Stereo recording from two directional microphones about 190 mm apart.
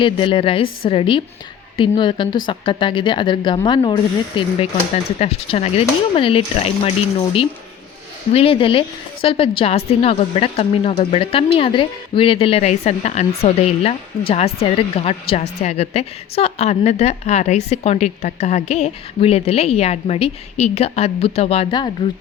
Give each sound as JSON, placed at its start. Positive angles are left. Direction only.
{"t": 0.0, "sound": "a woman's voice", "side_deg": 25}
{"t": 8.3, "sound": "a woman's voice", "side_deg": 30}